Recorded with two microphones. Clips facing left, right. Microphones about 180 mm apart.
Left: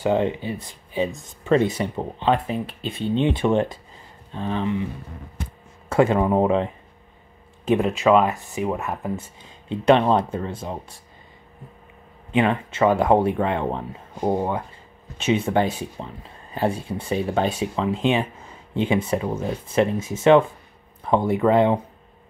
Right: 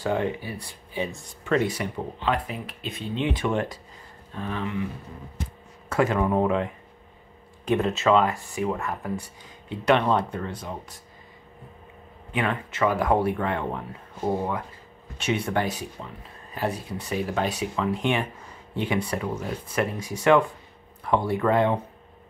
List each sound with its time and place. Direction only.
0.0 s speech: 20° left (ahead or behind)
5.9 s speech: 30° left (ahead or behind)
12.3 s speech: 25° left (ahead or behind)